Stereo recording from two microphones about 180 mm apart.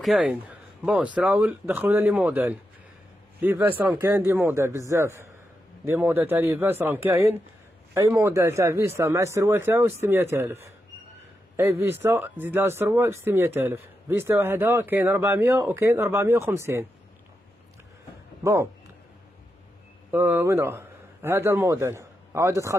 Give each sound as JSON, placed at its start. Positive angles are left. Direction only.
{"t": 0.0, "sound": "speech", "side_deg": -5}
{"t": 11.8, "sound": "speech", "side_deg": -15}
{"t": 18.4, "sound": "speech", "side_deg": -15}
{"t": 20.1, "sound": "a man's voice", "side_deg": -10}